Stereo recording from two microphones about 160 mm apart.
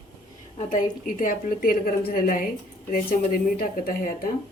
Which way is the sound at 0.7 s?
55° left (ahead or behind).